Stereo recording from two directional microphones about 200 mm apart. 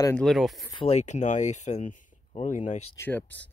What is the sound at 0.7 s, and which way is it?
Speech, 30° left (ahead or behind).